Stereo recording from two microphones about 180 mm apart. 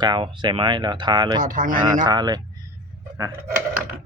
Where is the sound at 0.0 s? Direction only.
25° right (ahead or behind).